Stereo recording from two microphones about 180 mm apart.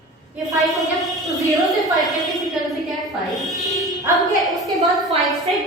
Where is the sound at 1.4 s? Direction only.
20° right (ahead or behind).